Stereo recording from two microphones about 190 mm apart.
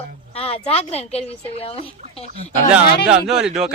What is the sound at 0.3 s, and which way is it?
Speech, 30° left (ahead or behind).